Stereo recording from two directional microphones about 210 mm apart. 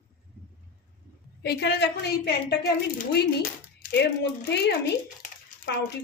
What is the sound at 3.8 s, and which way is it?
Speech, 50° left (ahead or behind).